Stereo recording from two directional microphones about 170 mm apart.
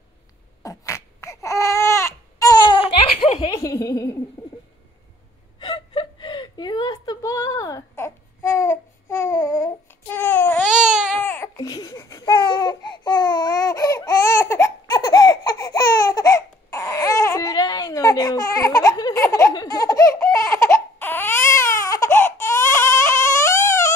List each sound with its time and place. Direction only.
0.6 s a sound: 20° left (ahead or behind)
5.6 s whimper: 30° left (ahead or behind); by 10.7 s 10° left (ahead or behind)
10.8 s baby cry: 5° right (ahead or behind)
11.2 s baby cry: 15° left (ahead or behind)
11.5 s babbling: 25° left (ahead or behind)
20.5 s baby cry: 15° left (ahead or behind)